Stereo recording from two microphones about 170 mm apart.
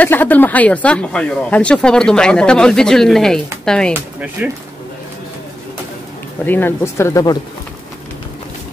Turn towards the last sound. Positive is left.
turn(degrees=15)  # may be behind; listen again after turning